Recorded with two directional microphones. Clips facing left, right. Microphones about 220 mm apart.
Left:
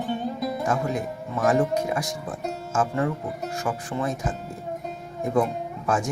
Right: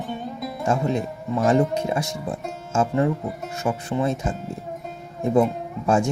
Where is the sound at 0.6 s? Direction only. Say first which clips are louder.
Right 6 dB; 25° right (ahead or behind).